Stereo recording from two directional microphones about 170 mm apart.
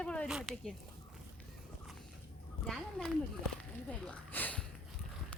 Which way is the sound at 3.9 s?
10° left (ahead or behind).